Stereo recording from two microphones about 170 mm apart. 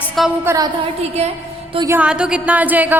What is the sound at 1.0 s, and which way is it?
Speech, 35° right (ahead or behind).